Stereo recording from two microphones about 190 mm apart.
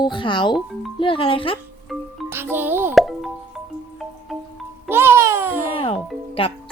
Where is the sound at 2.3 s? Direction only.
10° right (ahead or behind).